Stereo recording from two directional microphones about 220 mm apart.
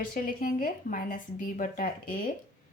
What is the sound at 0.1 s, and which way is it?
A woman's voice, 40° left (ahead or behind).